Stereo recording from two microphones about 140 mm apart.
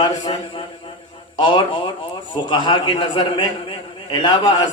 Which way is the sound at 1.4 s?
40° left (ahead or behind).